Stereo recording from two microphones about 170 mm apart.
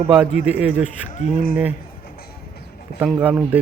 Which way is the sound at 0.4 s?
10° right (ahead or behind).